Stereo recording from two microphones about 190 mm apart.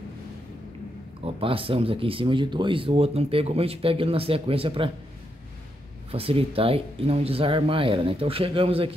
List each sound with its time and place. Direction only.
1.2 s speech: 30° right (ahead or behind)
6.1 s speech: 30° right (ahead or behind)